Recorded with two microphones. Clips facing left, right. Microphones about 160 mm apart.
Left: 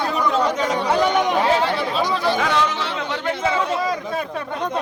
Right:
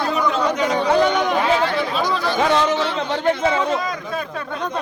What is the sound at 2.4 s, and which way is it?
Speech, 30° right (ahead or behind).